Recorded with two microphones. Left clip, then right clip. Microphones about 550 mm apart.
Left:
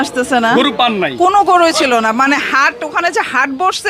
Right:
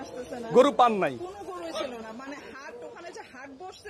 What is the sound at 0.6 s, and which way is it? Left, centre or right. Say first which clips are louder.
Speech: left 8 dB; centre.